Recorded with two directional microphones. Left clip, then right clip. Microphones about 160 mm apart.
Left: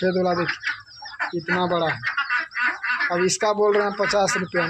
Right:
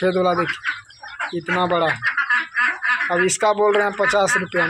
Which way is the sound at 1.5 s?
Centre (ahead or behind).